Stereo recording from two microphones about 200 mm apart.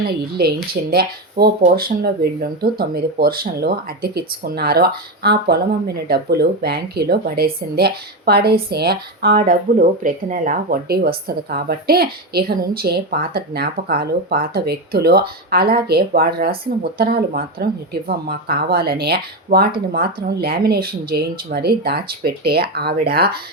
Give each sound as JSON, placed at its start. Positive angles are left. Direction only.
{"t": 0.3, "sound": "speech", "side_deg": -50}